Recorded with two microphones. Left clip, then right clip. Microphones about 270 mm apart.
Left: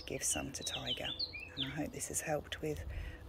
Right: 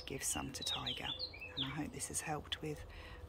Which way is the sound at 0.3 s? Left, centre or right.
Centre.